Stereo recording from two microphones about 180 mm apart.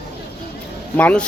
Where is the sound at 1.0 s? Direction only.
10° left (ahead or behind).